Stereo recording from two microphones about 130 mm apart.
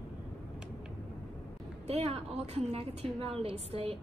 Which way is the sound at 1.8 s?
50° right (ahead or behind).